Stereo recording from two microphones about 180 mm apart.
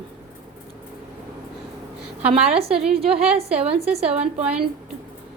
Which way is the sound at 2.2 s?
35° right (ahead or behind).